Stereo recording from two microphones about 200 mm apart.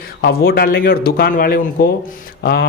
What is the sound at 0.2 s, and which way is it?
A man's voice, 50° left (ahead or behind).